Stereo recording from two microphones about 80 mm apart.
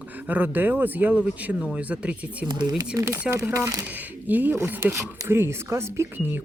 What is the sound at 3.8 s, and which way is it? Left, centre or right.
Speech, right.